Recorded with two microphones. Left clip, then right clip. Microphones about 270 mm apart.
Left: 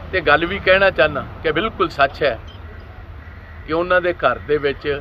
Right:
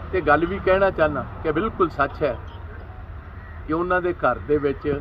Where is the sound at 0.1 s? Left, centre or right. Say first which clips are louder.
Left 4 dB; centre.